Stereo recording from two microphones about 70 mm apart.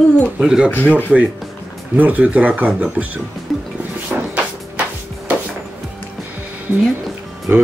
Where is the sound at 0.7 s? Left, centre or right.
Left.